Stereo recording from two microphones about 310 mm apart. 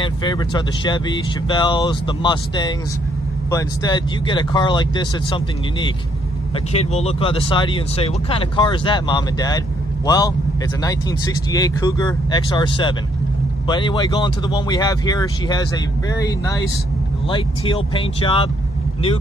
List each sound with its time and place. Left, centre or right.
0.0 s speech: centre